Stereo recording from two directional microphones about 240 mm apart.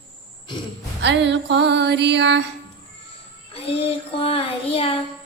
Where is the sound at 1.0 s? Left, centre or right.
Right.